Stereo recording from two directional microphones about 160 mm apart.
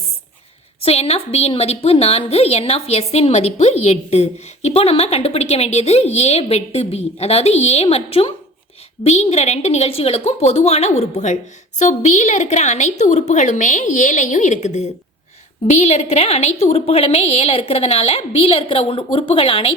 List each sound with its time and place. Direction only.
0.8 s a woman's voice: 40° left (ahead or behind)